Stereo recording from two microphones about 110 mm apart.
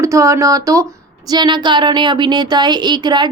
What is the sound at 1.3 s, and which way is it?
A woman's voice, 40° right (ahead or behind).